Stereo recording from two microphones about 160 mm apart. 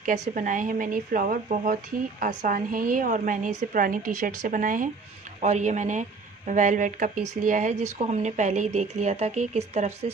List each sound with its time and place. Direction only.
0.3 s speech: 55° right (ahead or behind)
5.4 s speech: 45° right (ahead or behind)